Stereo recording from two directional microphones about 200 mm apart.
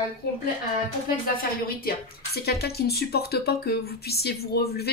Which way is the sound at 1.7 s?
50° left (ahead or behind).